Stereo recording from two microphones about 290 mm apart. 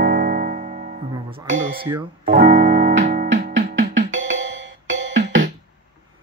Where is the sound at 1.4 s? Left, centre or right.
Right.